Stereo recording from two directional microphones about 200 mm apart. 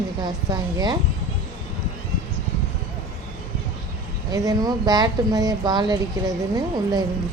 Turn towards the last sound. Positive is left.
turn(degrees=-20)  # may be behind; listen again after turning